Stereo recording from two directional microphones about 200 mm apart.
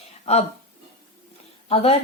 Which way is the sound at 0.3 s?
30° left (ahead or behind).